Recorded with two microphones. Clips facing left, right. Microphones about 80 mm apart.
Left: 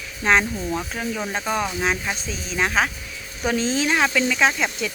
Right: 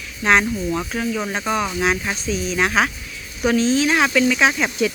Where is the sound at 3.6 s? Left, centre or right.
Left.